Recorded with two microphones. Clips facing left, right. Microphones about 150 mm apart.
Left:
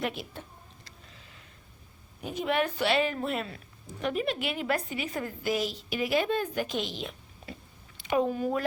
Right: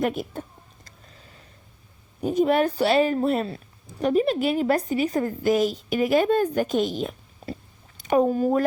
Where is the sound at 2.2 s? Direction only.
40° right (ahead or behind).